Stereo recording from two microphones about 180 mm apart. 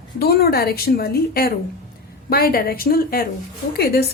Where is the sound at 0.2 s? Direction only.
60° left (ahead or behind).